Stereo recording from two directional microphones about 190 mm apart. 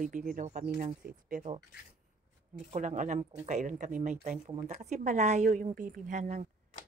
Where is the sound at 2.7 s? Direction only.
40° right (ahead or behind).